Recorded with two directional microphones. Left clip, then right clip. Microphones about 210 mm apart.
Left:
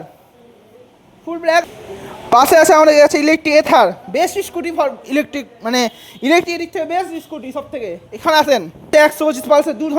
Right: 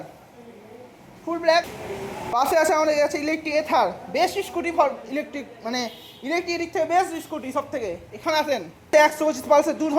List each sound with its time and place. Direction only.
1.3 s a woman's voice: 35° left (ahead or behind)
2.3 s a woman's voice: 55° left (ahead or behind); by 8.2 s 35° left (ahead or behind)
8.2 s a woman's voice: 50° left (ahead or behind); by 9.9 s 35° left (ahead or behind)